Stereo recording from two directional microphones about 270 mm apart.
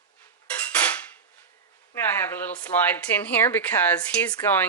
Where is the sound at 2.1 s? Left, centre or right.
Centre.